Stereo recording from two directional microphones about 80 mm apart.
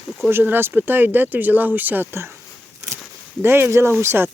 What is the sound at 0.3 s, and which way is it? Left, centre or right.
Speech, right.